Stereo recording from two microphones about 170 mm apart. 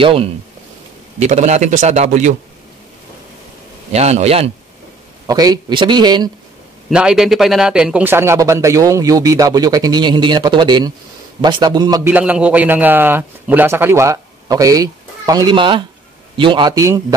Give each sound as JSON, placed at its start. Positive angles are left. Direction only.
{"t": 0.0, "sound": "a man's voice", "side_deg": -35}
{"t": 3.9, "sound": "a man's voice", "side_deg": -40}
{"t": 5.2, "sound": "a man's voice", "side_deg": -20}
{"t": 6.9, "sound": "a man's voice", "side_deg": -5}
{"t": 12.1, "sound": "a man's voice", "side_deg": -10}